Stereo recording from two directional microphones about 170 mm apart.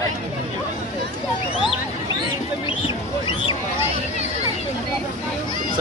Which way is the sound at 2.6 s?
30° left (ahead or behind).